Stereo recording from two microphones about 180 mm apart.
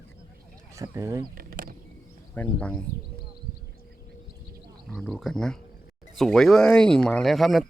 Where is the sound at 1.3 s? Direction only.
55° right (ahead or behind).